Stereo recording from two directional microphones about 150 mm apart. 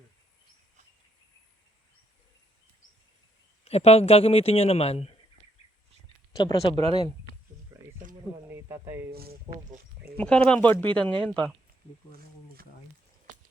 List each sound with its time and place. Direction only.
3.6 s speech: 45° left (ahead or behind)
6.3 s speech: 30° left (ahead or behind)
7.7 s a sound: 20° right (ahead or behind)
8.6 s speech: 20° right (ahead or behind)
9.1 s speech: 90° right
10.2 s speech: 5° left (ahead or behind)